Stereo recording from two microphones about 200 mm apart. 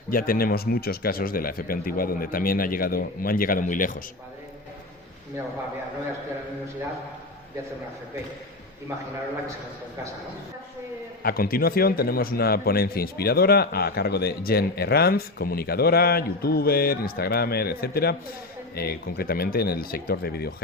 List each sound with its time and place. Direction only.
0.1 s a man's voice: 45° left (ahead or behind)
11.2 s a man's voice: 50° left (ahead or behind)